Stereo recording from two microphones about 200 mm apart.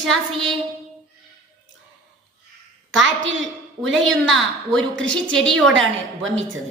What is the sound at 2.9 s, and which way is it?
Speech, 70° right (ahead or behind).